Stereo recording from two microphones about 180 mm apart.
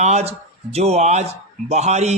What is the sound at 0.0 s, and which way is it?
Speech, 40° right (ahead or behind).